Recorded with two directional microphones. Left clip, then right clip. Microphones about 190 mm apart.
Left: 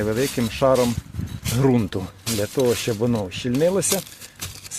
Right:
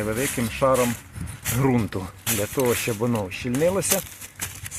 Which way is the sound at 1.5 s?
30° left (ahead or behind).